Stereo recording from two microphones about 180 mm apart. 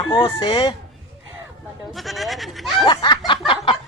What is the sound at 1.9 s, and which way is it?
Speech, centre (ahead or behind).